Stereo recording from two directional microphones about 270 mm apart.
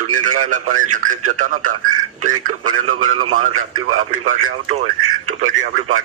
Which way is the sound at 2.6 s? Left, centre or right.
Right.